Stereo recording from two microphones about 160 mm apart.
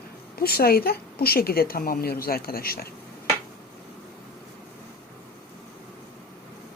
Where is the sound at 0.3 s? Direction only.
70° left (ahead or behind).